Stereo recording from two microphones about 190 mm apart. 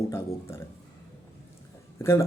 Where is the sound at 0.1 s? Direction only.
15° left (ahead or behind).